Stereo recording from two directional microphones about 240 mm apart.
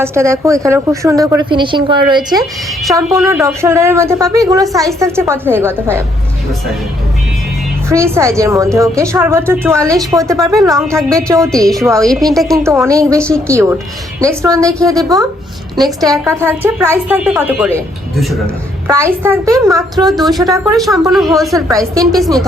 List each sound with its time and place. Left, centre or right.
0.0 s a woman's voice: centre
7.9 s a woman's voice: centre
11.5 s a woman's voice: centre
12.6 s a woman's voice: centre
18.9 s a woman's voice: centre
20.7 s a woman's voice: centre
21.5 s a woman's voice: centre